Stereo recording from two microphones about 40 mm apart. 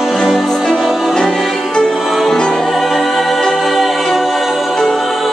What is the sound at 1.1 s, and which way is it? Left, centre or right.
Music, centre.